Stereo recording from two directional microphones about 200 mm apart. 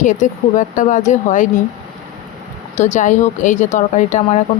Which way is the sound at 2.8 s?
35° left (ahead or behind).